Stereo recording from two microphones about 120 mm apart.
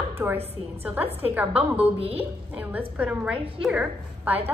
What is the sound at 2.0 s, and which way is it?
Speech, 55° right (ahead or behind).